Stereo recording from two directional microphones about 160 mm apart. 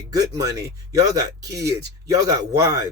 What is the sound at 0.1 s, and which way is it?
Speech, 20° right (ahead or behind).